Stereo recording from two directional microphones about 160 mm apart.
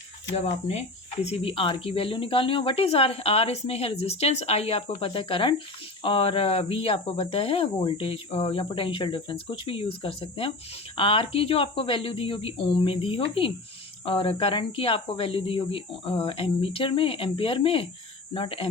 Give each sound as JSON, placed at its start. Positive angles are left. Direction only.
{"t": 0.3, "sound": "speech", "side_deg": 45}